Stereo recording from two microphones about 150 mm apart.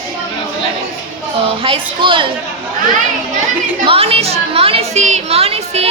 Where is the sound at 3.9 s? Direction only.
40° right (ahead or behind).